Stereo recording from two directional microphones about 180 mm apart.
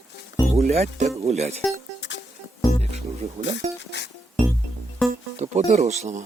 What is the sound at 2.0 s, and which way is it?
Music, 80° left.